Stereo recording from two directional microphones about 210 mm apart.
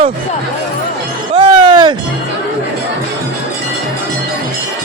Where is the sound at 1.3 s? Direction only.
25° right (ahead or behind).